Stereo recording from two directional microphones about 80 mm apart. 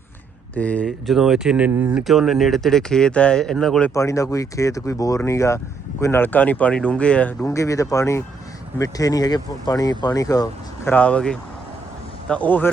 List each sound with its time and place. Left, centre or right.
0.5 s speech: centre
0.9 s speech: centre
2.0 s speech: centre
3.9 s speech: left; by 7.4 s centre
7.4 s speech: left
10.8 s speech: centre